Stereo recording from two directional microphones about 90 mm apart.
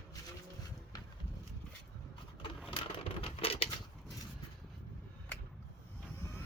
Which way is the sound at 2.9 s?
90° left.